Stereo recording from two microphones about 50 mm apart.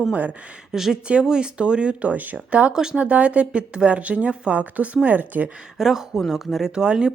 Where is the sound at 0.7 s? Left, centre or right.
Centre; by 2.7 s right.